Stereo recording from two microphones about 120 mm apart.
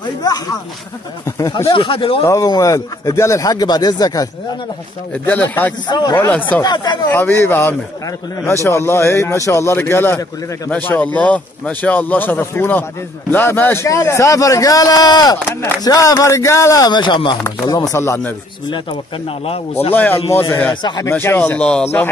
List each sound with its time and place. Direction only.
1.7 s speech: 50° left (ahead or behind)
2.2 s speech: 30° left (ahead or behind)
5.1 s speech: 15° left (ahead or behind)
5.9 s speech: 35° left (ahead or behind)
7.1 s speech: 15° left (ahead or behind); by 17.4 s 40° left (ahead or behind)
17.6 s speech: 25° left (ahead or behind)
19.9 s speech: 15° left (ahead or behind); by 21.1 s 35° left (ahead or behind)
21.1 s speech: 20° left (ahead or behind)